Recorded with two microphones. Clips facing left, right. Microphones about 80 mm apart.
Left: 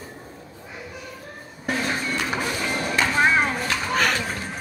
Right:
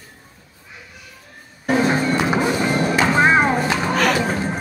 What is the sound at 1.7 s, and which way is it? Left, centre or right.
Music, right.